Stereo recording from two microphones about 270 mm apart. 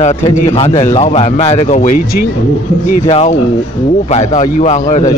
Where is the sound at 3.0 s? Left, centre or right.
Left.